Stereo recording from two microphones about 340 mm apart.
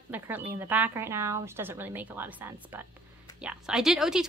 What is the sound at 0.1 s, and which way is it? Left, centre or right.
A woman's voice, centre.